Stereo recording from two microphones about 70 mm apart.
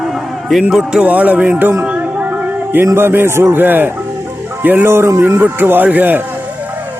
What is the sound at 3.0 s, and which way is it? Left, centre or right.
A man's voice, right.